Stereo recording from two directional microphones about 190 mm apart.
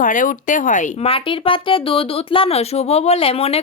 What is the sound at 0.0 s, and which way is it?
Speech, 45° left (ahead or behind).